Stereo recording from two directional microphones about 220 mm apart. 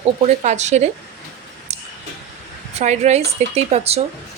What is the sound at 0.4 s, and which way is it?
Speech, 30° right (ahead or behind).